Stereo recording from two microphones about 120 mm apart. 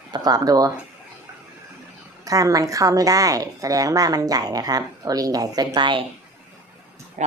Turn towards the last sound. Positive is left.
turn(degrees=-45)  # may be behind; listen again after turning